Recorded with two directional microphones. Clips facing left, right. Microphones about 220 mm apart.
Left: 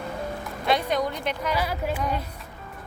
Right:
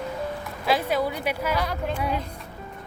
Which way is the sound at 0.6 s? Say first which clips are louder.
Right 1 dB; 5° right (ahead or behind).